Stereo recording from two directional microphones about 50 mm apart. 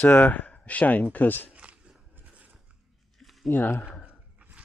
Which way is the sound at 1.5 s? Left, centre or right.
Right.